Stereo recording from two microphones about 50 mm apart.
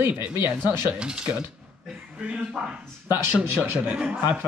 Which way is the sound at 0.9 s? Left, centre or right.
Centre.